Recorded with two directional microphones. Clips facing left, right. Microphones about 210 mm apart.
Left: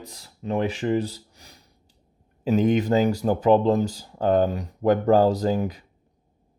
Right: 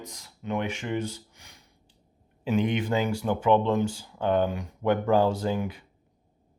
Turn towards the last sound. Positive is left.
turn(degrees=40)  # may be behind; listen again after turning